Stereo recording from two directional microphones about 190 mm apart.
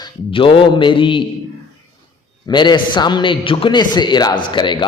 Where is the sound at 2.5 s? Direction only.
25° left (ahead or behind).